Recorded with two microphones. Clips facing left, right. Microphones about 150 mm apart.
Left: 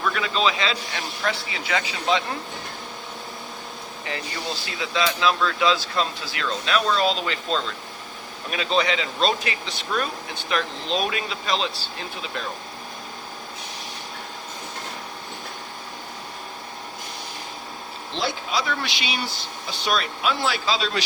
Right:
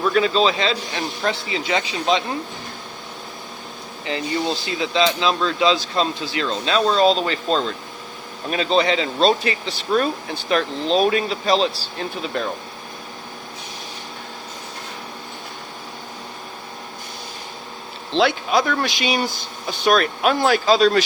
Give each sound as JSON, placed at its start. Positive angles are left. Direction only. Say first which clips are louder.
{"t": 0.0, "sound": "speech", "louder": "right 6 dB", "side_deg": -30}
{"t": 4.0, "sound": "speech", "louder": "right 8 dB", "side_deg": -25}
{"t": 18.2, "sound": "speech", "louder": "right 8 dB", "side_deg": -55}